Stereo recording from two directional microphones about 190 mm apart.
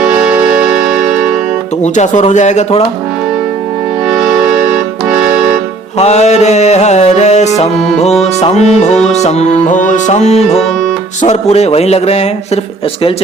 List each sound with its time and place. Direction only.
0.0 s music: 5° right (ahead or behind)
1.8 s music: 40° left (ahead or behind)
4.1 s music: 5° right (ahead or behind)
6.0 s music: 35° left (ahead or behind)